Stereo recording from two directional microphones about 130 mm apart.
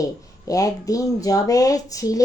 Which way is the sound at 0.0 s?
25° left (ahead or behind).